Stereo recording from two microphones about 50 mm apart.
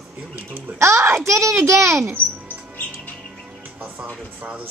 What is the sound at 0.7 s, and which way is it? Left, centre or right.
A child's voice, right.